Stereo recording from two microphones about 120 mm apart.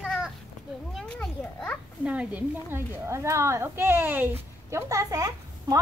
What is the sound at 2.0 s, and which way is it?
A woman's voice, 10° right (ahead or behind).